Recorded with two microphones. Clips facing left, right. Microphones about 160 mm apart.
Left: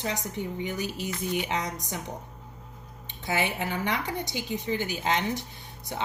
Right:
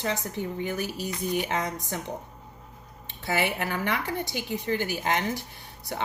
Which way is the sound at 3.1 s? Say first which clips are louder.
Right 1 dB; 20° left (ahead or behind).